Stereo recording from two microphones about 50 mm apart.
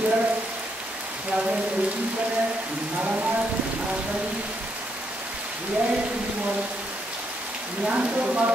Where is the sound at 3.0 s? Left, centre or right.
Right.